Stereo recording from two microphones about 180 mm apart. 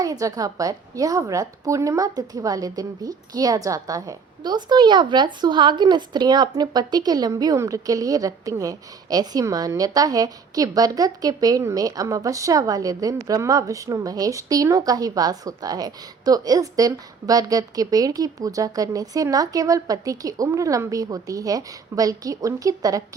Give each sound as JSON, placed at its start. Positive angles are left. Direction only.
{"t": 0.0, "sound": "a woman's voice", "side_deg": -20}